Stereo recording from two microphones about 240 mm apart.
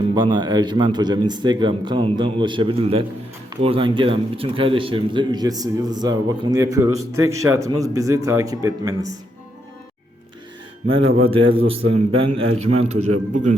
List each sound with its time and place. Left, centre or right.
0.1 s a man's voice: centre
10.8 s a man's voice: right
11.2 s speech: right
11.8 s a man's voice: right
12.9 s speech: right